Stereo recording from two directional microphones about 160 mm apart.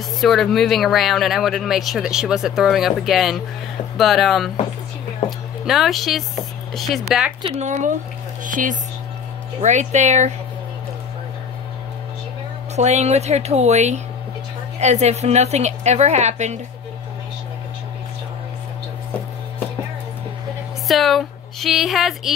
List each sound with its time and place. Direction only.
0.2 s speech: centre (ahead or behind)
5.7 s speech: centre (ahead or behind)
7.4 s a woman's voice: 45° right (ahead or behind)
12.7 s a woman's voice: 45° right (ahead or behind)
20.9 s speech: centre (ahead or behind)